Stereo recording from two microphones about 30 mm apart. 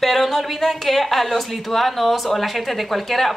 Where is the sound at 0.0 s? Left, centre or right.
Centre.